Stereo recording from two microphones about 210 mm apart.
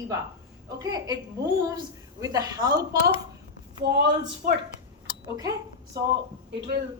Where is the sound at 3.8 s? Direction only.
50° right (ahead or behind).